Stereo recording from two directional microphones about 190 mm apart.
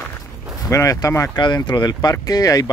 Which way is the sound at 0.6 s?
15° left (ahead or behind).